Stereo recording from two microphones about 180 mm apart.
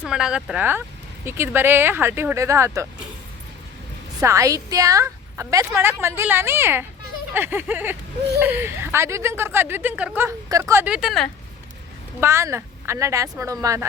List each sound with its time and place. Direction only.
0.0 s speech: 5° right (ahead or behind)
4.2 s speech: 15° right (ahead or behind); by 11.3 s centre (ahead or behind)
12.2 s speech: 15° right (ahead or behind)